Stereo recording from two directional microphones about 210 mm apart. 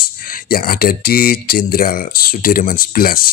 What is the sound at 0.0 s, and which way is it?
Speech, 40° left (ahead or behind).